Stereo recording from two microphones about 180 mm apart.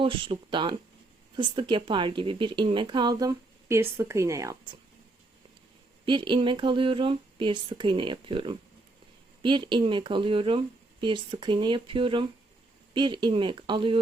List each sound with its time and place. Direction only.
0.0 s speech: 30° right (ahead or behind)
6.1 s speech: 25° right (ahead or behind)